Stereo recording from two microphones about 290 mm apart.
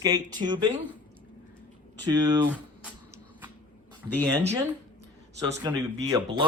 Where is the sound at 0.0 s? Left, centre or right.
Centre.